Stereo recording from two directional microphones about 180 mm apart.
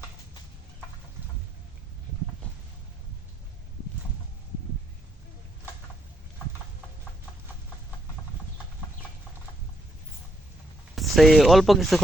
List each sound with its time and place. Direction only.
10.9 s speech: centre (ahead or behind)